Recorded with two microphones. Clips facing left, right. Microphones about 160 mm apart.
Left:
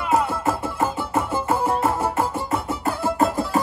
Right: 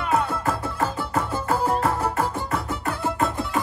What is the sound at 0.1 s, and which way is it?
Music, 25° left (ahead or behind).